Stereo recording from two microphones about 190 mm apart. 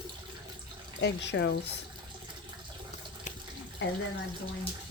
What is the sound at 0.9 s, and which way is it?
Speech, 70° left (ahead or behind).